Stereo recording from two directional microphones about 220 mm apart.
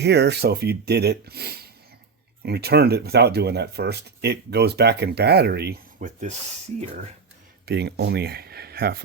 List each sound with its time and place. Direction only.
0.0 s speech: 50° right (ahead or behind)
7.6 s speech: 50° right (ahead or behind)